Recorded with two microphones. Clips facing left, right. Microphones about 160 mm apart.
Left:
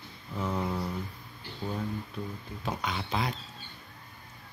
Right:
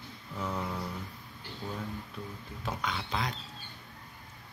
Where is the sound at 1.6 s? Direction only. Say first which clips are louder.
Left 4 dB; 20° left (ahead or behind).